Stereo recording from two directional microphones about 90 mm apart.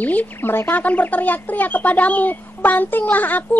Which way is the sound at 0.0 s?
20° left (ahead or behind).